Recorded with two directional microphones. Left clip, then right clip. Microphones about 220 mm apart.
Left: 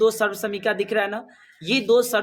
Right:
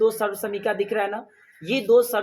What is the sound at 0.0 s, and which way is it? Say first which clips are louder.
Speech: left 2 dB; 30° left (ahead or behind).